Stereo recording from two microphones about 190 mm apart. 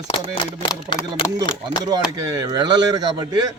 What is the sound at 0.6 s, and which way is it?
Speech, 25° left (ahead or behind).